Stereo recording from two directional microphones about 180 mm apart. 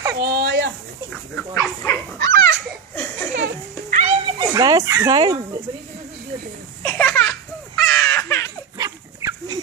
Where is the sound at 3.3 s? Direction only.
75° right (ahead or behind).